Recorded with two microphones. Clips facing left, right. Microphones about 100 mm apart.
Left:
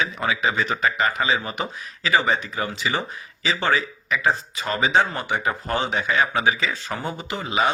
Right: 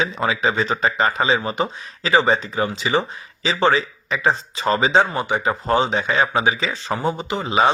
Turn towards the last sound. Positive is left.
turn(degrees=-30)  # may be behind; listen again after turning